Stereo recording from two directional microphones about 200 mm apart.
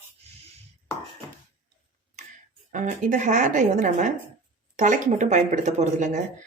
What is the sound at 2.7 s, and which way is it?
Speech, 40° right (ahead or behind).